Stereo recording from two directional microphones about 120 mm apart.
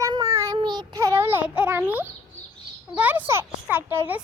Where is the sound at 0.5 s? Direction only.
40° right (ahead or behind); by 2.1 s 15° right (ahead or behind).